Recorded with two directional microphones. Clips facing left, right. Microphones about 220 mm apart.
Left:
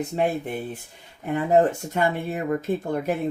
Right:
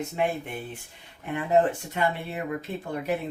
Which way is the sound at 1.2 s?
45° left (ahead or behind).